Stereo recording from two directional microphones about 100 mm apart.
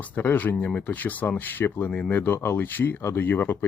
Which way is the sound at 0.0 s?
20° left (ahead or behind).